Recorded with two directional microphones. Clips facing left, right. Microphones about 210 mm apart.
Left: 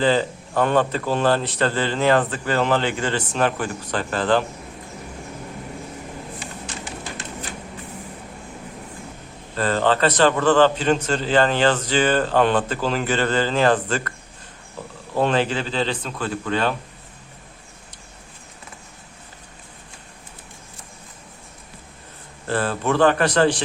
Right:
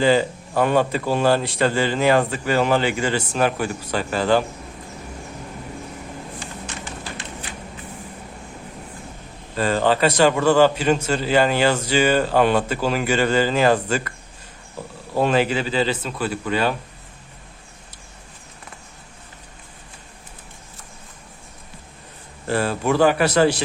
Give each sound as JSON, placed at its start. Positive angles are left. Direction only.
{"t": 0.0, "sound": "a man's voice", "side_deg": -10}
{"t": 9.6, "sound": "a man's voice", "side_deg": -10}
{"t": 15.1, "sound": "a man's voice", "side_deg": -10}
{"t": 22.4, "sound": "a man's voice", "side_deg": -10}